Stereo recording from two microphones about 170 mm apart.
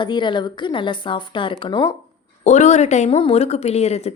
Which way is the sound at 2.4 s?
40° left (ahead or behind).